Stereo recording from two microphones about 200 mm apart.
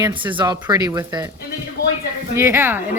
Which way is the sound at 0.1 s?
25° right (ahead or behind).